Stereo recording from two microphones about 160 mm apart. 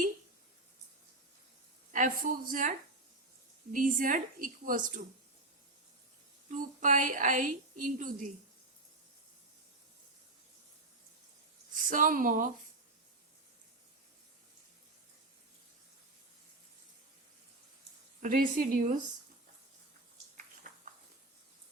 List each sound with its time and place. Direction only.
1.9 s a woman's voice: 60° right (ahead or behind)
6.5 s a woman's voice: 55° right (ahead or behind)
11.7 s speech: 55° right (ahead or behind)
18.2 s a woman's voice: 55° right (ahead or behind)
20.7 s a sound: 55° right (ahead or behind)